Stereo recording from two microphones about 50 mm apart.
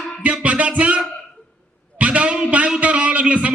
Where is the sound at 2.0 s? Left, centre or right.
Right.